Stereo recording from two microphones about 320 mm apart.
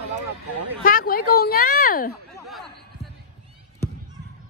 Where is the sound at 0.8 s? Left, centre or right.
Left.